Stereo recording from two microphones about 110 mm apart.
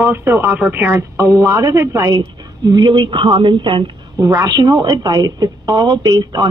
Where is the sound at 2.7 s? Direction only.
45° right (ahead or behind).